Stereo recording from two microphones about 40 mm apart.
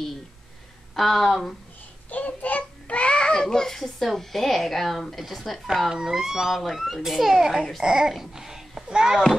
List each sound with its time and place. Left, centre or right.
0.9 s speech: centre
2.0 s child singing: left; by 4.1 s centre
4.2 s speech: centre
5.9 s a child's voice: centre
8.2 s babbling: centre
8.8 s a child's voice: centre